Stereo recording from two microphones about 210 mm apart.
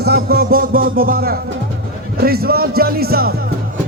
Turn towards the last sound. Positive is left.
turn(degrees=-45)  # may be behind; listen again after turning